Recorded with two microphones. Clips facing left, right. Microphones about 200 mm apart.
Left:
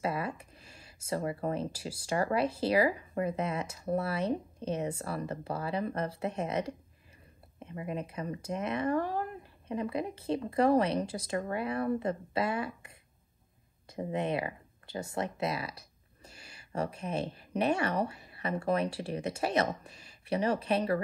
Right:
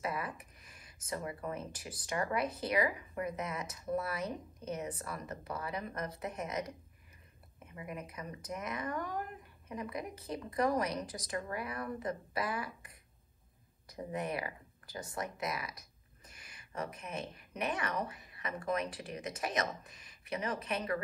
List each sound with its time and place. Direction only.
0.0 s speech: 30° left (ahead or behind)